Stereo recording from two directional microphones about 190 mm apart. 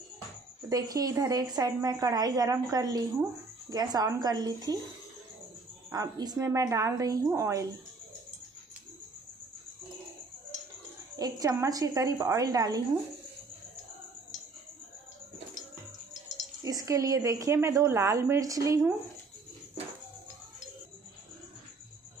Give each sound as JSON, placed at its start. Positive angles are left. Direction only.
{"t": 0.7, "sound": "a woman's voice", "side_deg": -20}
{"t": 5.9, "sound": "a woman's voice", "side_deg": -20}
{"t": 11.1, "sound": "a woman's voice", "side_deg": -20}
{"t": 16.6, "sound": "a woman's voice", "side_deg": -15}